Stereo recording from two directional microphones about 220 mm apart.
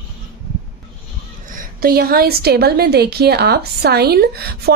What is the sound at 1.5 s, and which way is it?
A woman's voice, 45° right (ahead or behind).